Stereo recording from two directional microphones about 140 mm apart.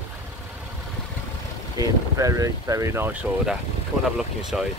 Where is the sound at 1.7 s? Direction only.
25° right (ahead or behind).